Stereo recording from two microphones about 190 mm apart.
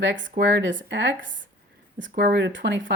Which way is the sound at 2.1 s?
55° right (ahead or behind).